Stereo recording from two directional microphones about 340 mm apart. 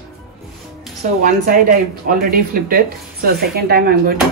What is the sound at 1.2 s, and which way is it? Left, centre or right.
Speech, right.